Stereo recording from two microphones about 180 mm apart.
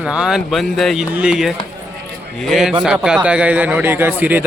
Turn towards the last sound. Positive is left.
turn(degrees=-10)  # may be behind; listen again after turning